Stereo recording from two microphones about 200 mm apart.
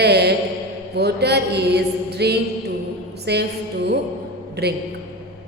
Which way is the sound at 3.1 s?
55° right (ahead or behind).